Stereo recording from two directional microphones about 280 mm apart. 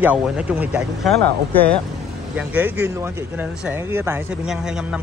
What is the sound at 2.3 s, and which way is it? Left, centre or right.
Speech, centre.